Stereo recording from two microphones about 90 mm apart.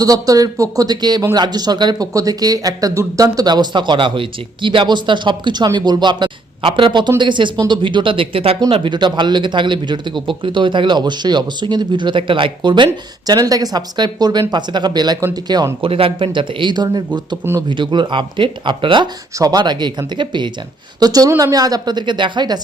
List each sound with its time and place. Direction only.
0.0 s a woman's voice: 40° right (ahead or behind); by 8.5 s 90° right
8.7 s a woman's voice: 65° right (ahead or behind)
15.8 s speech: 90° right; by 16.7 s 65° right (ahead or behind)
16.7 s a woman's voice: 50° right (ahead or behind); by 19.0 s 65° right (ahead or behind)
19.4 s a woman's voice: 45° right (ahead or behind)
21.0 s a woman's voice: 45° right (ahead or behind)